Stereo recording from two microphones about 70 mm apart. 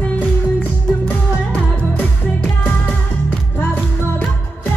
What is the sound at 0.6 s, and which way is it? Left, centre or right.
Music, left.